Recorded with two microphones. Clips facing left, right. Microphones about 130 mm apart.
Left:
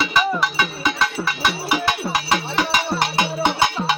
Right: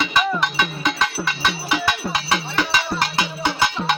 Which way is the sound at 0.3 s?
Centre (ahead or behind).